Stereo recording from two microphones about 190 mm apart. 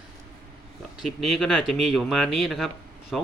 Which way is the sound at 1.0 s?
Centre (ahead or behind).